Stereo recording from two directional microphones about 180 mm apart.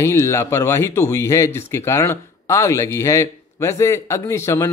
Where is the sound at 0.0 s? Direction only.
15° left (ahead or behind).